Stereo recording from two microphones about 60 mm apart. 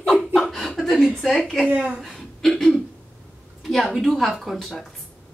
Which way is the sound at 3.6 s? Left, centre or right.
Centre.